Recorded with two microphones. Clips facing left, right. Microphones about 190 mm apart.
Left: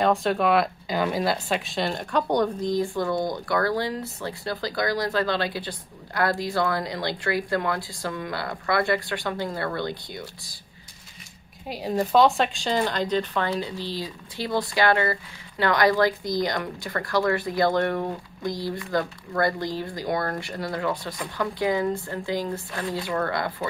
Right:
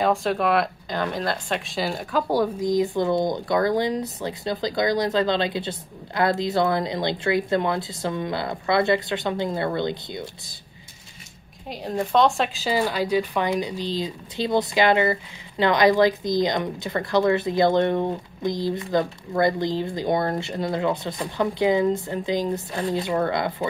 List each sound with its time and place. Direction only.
0.0 s speech: centre (ahead or behind); by 10.5 s 20° right (ahead or behind)
11.6 s speech: centre (ahead or behind); by 23.5 s 20° right (ahead or behind)